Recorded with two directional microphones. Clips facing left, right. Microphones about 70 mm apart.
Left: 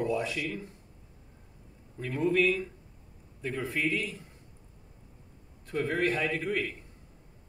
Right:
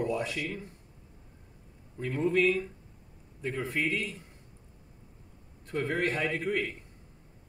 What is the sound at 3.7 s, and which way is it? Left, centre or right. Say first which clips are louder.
Speech: left 1 dB; right.